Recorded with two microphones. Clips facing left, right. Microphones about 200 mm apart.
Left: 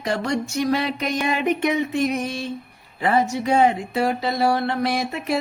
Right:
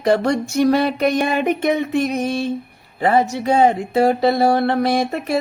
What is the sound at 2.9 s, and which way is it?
Speech, 40° right (ahead or behind).